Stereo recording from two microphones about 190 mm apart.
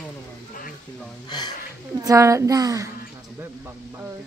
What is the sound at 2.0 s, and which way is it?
Speech, 15° right (ahead or behind).